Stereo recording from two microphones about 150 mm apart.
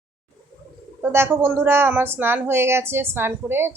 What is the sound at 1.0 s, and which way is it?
Speech, 15° right (ahead or behind).